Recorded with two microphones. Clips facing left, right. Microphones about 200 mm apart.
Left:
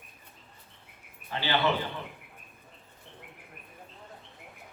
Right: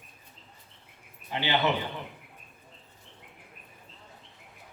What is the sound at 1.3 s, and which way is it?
Speech, 20° right (ahead or behind).